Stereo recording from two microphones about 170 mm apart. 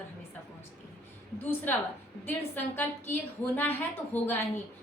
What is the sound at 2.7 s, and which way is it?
A woman's voice, 10° left (ahead or behind).